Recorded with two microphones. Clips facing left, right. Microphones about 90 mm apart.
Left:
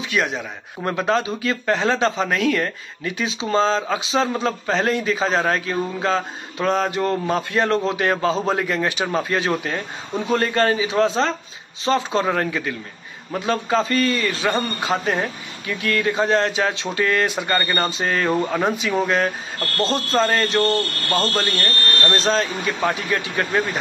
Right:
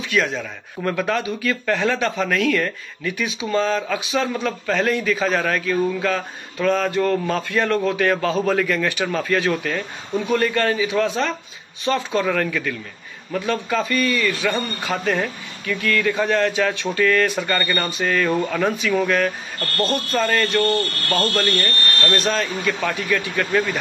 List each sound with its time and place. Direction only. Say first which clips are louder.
0.0 s a man's voice: right 1 dB; 20° left (ahead or behind)
22.1 s a man's voice: left 2 dB; 25° left (ahead or behind)